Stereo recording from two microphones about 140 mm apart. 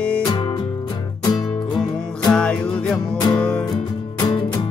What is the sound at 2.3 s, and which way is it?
Music, 5° left (ahead or behind).